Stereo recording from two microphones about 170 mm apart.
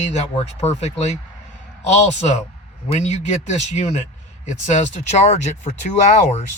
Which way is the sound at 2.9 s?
40° left (ahead or behind).